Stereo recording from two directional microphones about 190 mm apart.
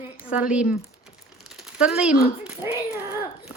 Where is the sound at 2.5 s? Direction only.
10° right (ahead or behind).